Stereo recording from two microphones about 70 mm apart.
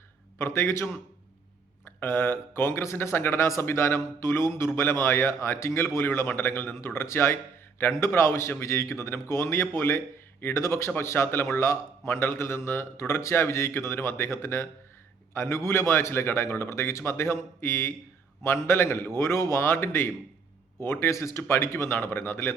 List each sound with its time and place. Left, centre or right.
0.3 s speech: left